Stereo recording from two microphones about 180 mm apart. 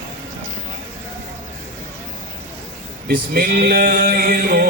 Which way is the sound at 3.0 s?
55° right (ahead or behind).